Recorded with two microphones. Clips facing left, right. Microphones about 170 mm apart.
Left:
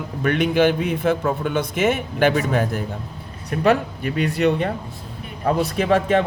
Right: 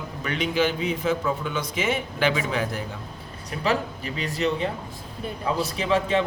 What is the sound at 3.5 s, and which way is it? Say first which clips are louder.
Speech: left 7 dB; 60° left (ahead or behind).